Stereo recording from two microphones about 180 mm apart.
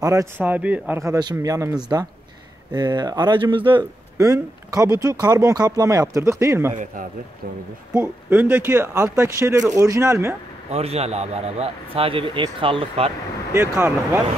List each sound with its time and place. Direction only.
0.0 s speech: 15° right (ahead or behind)
6.7 s a man's voice: 45° right (ahead or behind)
7.9 s speech: 10° right (ahead or behind)
10.7 s a man's voice: 35° right (ahead or behind)
13.5 s speech: 15° right (ahead or behind)